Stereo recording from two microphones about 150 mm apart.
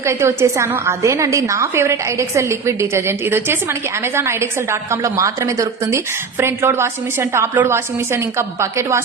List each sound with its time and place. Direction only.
0.0 s a woman's voice: 20° right (ahead or behind)